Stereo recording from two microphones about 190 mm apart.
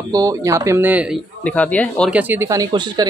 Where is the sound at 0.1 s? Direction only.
20° right (ahead or behind).